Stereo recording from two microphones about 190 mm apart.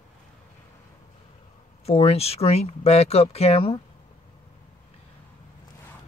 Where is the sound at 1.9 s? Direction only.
35° left (ahead or behind).